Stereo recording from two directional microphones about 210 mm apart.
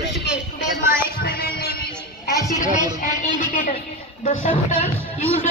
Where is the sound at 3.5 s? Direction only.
40° left (ahead or behind).